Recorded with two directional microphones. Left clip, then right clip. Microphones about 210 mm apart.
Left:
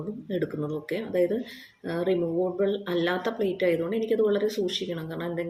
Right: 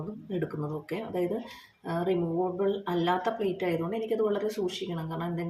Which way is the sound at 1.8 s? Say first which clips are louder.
Left 3 dB; 5° left (ahead or behind).